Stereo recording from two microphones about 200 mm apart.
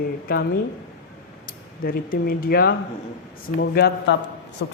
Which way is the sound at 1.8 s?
45° left (ahead or behind).